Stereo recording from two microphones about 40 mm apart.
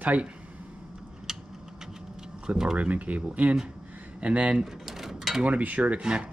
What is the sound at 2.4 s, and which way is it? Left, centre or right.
Speech, centre.